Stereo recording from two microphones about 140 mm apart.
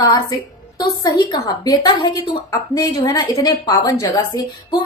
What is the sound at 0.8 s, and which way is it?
A woman's voice, 30° left (ahead or behind).